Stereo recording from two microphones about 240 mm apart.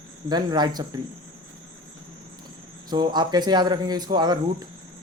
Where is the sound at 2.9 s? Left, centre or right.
Centre.